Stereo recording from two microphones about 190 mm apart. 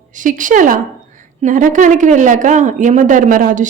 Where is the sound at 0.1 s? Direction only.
45° right (ahead or behind).